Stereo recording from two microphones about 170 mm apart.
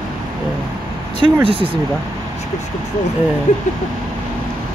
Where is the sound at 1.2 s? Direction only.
30° right (ahead or behind).